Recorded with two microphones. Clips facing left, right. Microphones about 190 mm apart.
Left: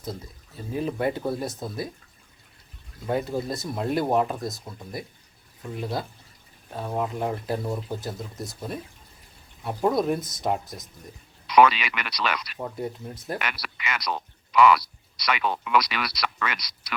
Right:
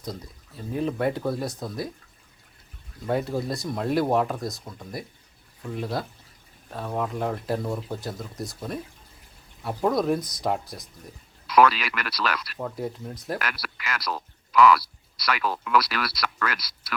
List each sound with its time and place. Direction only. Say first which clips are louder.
0.0 s speech: even; centre (ahead or behind)
3.1 s speech: even; centre (ahead or behind)
10.2 s speech: right 2 dB; 25° left (ahead or behind)
10.4 s speech: even; centre (ahead or behind)